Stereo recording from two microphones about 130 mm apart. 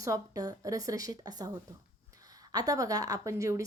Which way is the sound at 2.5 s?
25° right (ahead or behind).